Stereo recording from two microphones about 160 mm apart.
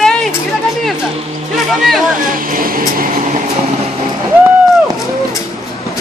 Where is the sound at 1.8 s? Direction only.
Centre (ahead or behind).